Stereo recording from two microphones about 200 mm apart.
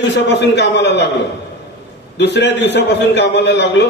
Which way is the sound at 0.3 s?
60° left (ahead or behind).